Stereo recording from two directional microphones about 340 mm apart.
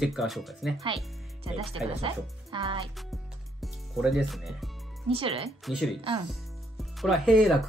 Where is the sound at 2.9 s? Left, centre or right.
Centre.